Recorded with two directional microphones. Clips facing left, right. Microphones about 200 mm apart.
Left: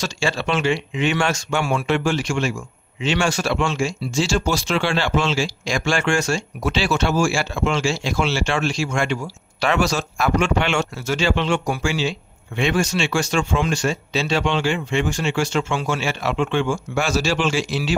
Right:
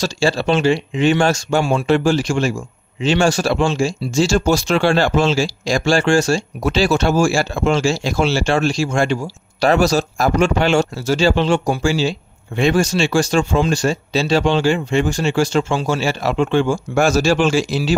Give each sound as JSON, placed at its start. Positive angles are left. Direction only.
{"t": 0.0, "sound": "speech", "side_deg": -35}